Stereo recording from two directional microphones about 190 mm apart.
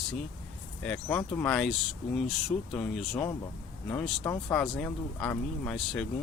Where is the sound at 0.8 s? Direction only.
10° left (ahead or behind).